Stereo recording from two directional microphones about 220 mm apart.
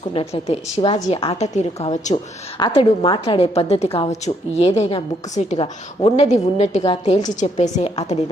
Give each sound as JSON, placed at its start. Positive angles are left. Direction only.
{"t": 0.1, "sound": "a woman's voice", "side_deg": 25}
{"t": 2.6, "sound": "a woman's voice", "side_deg": 20}